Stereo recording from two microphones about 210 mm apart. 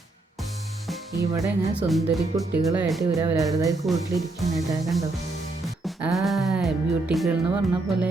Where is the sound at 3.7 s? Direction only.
Centre (ahead or behind).